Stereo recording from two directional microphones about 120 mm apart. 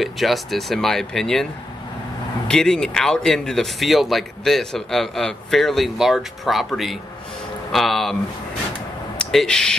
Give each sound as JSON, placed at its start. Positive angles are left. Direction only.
{"t": 0.0, "sound": "speech", "side_deg": 0}
{"t": 9.2, "sound": "speech", "side_deg": 5}